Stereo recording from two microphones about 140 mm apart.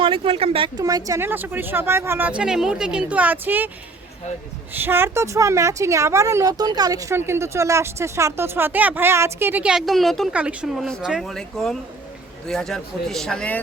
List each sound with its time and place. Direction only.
0.0 s speech: 40° right (ahead or behind)
0.8 s a woman's voice: 25° right (ahead or behind)
4.7 s a woman's voice: 15° right (ahead or behind); by 13.6 s 5° left (ahead or behind)